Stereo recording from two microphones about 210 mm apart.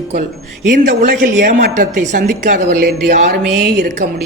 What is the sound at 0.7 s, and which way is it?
A woman's voice, 45° right (ahead or behind).